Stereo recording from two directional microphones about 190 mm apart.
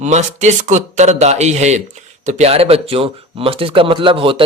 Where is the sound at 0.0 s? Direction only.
40° right (ahead or behind).